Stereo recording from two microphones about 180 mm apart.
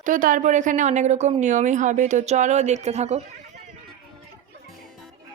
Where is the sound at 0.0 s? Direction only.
50° right (ahead or behind).